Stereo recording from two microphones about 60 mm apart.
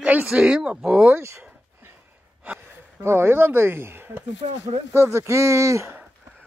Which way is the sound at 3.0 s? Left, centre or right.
Right.